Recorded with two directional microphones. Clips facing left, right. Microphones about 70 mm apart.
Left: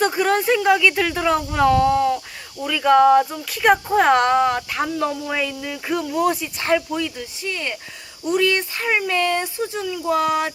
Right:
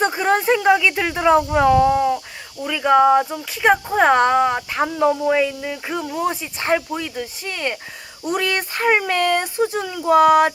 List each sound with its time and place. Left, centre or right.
0.2 s speech: right
6.0 s speech: right
7.2 s speech: right